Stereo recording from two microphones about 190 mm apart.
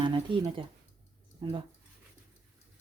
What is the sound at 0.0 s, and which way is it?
Speech, 25° right (ahead or behind).